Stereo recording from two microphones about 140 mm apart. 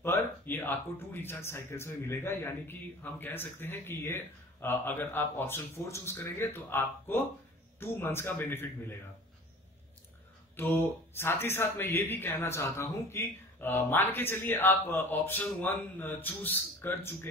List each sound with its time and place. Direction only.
0.0 s a man's voice: 15° left (ahead or behind)
10.5 s a man's voice: 15° left (ahead or behind)